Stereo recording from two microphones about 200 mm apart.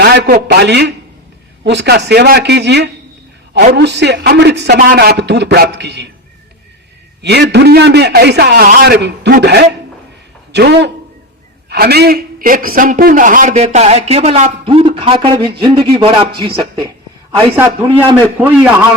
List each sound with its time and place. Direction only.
0.0 s a man's voice: 55° right (ahead or behind)
7.2 s a man's voice: 55° right (ahead or behind); by 16.8 s 25° right (ahead or behind)
17.5 s a man's voice: 10° right (ahead or behind)